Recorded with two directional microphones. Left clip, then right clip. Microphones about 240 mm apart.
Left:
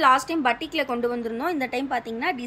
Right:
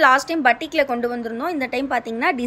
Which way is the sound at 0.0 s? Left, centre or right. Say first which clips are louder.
Right 4 dB; centre.